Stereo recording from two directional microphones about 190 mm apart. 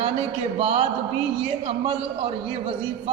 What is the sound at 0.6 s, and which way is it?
A man's voice, 35° right (ahead or behind).